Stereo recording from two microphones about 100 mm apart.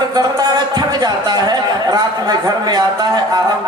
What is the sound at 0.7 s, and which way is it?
Speech, 40° right (ahead or behind).